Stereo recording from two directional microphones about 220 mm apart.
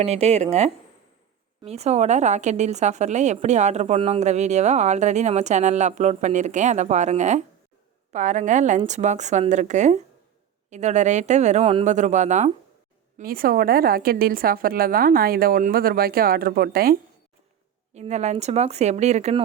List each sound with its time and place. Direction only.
0.0 s speech: 30° right (ahead or behind)
1.6 s a woman's voice: 30° right (ahead or behind)
17.9 s a woman's voice: 30° right (ahead or behind)